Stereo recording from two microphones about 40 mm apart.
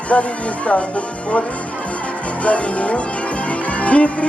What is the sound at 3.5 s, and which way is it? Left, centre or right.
Music, left.